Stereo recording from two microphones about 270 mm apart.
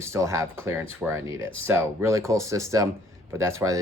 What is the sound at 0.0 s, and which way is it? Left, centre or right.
Speech, centre.